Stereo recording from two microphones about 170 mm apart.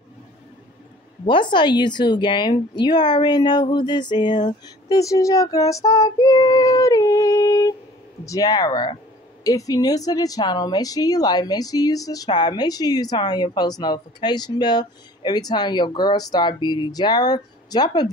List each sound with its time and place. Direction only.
1.2 s a woman's voice: 30° left (ahead or behind)